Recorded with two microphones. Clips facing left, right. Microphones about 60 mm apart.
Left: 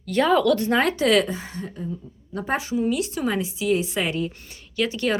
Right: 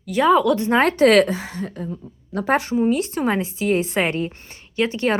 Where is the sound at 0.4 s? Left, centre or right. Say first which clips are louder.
Right 2 dB; right.